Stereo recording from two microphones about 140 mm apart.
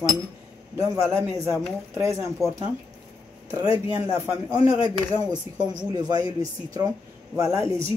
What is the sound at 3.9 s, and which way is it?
Speech, 25° right (ahead or behind).